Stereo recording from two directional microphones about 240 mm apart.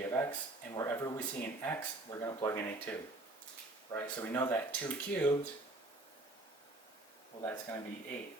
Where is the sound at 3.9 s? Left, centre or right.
Centre.